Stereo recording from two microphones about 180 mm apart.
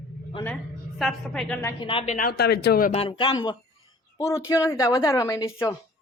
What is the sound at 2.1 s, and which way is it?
Speech, 60° left (ahead or behind).